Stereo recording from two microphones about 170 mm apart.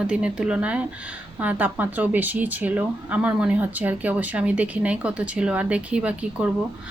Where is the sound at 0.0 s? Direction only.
5° right (ahead or behind).